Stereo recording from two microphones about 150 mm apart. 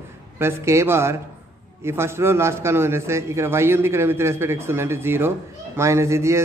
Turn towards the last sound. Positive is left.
turn(degrees=-20)  # may be behind; listen again after turning